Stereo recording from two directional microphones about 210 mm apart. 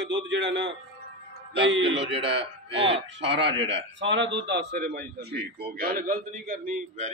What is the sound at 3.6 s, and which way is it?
A man's voice, 60° right (ahead or behind).